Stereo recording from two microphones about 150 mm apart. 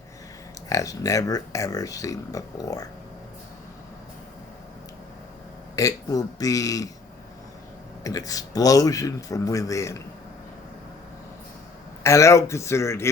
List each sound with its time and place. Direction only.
0.7 s speech: 25° left (ahead or behind)
5.7 s speech: 25° left (ahead or behind)
8.0 s speech: 25° left (ahead or behind)
12.0 s speech: 20° left (ahead or behind)